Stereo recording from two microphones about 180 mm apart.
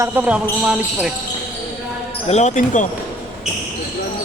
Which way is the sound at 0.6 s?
5° right (ahead or behind).